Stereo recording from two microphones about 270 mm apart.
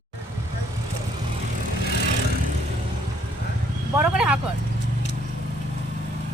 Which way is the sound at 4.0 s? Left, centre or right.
Centre.